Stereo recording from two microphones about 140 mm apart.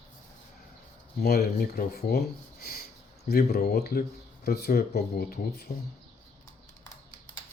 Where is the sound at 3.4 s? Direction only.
90° left.